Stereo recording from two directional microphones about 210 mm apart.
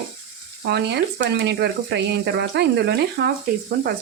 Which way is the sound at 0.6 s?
50° right (ahead or behind).